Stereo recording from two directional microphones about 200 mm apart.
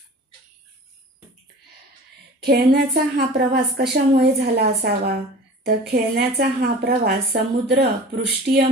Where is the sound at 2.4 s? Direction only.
50° right (ahead or behind).